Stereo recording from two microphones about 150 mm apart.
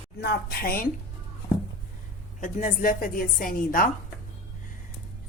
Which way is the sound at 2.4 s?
60° left (ahead or behind).